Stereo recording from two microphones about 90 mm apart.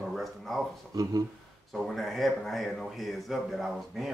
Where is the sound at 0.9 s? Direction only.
40° right (ahead or behind).